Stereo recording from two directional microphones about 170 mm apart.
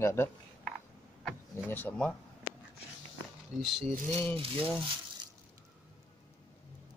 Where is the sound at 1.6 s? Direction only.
10° left (ahead or behind).